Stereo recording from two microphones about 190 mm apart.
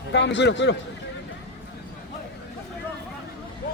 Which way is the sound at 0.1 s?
70° left (ahead or behind).